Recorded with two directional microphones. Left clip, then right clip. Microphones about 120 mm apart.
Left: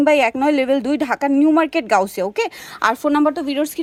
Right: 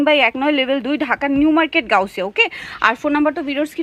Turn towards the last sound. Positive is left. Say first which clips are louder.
# even
turn(degrees=20)  # may be behind; listen again after turning